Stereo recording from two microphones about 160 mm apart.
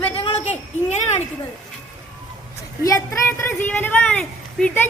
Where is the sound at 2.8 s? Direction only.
20° left (ahead or behind).